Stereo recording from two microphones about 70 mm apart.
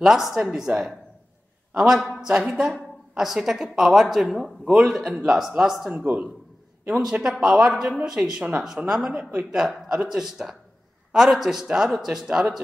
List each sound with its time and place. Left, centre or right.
0.0 s a woman's voice: centre
2.2 s a woman's voice: centre
9.1 s a woman's voice: right